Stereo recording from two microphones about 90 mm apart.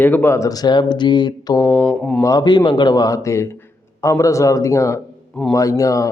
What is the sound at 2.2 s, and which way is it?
A man's voice, 45° left (ahead or behind).